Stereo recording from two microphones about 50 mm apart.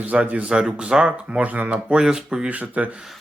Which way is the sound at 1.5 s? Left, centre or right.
Right.